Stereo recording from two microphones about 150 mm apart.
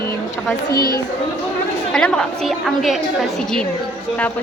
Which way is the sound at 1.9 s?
5° left (ahead or behind).